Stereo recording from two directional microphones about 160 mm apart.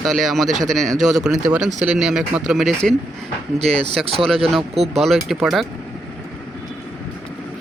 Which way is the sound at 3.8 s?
40° right (ahead or behind).